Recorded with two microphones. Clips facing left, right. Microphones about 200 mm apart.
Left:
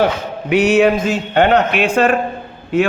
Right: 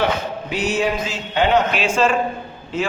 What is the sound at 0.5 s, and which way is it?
A man's voice, 65° left (ahead or behind).